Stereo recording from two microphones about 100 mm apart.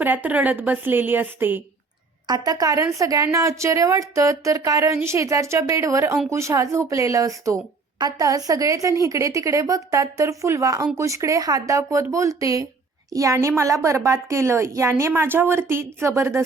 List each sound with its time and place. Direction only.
0.0 s a woman's voice: 20° right (ahead or behind)
2.2 s a woman's voice: 40° right (ahead or behind)